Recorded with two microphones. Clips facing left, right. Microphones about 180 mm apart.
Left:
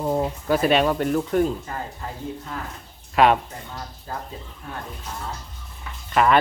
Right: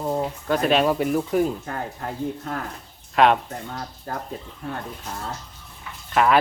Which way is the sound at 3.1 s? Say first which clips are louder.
Even; centre (ahead or behind).